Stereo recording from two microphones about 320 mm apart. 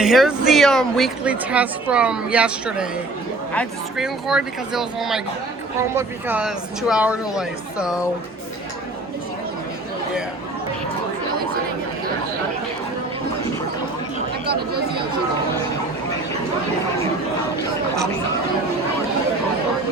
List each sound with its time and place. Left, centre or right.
0.0 s a woman's voice: centre
14.4 s chatter: right